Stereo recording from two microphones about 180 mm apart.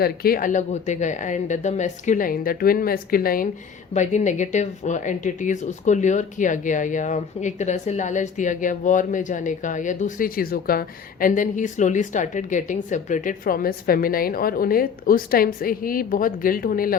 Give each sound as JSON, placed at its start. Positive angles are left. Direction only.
{"t": 0.0, "sound": "speech", "side_deg": 55}
{"t": 3.9, "sound": "speech", "side_deg": 40}